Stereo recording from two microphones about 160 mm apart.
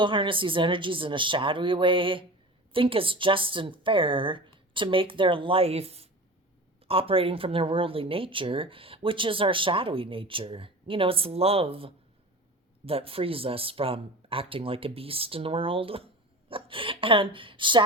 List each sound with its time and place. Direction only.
0.0 s speech: 30° right (ahead or behind)